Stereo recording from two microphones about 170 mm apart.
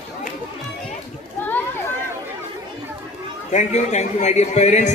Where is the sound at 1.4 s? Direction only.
10° left (ahead or behind).